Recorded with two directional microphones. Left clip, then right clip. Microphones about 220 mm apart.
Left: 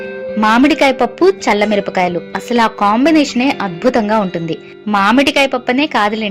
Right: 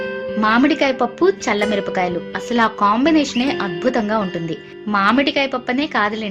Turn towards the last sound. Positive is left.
turn(degrees=25)  # may be behind; listen again after turning